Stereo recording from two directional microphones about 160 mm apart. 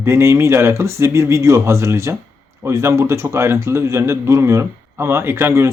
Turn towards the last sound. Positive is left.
turn(degrees=-15)  # may be behind; listen again after turning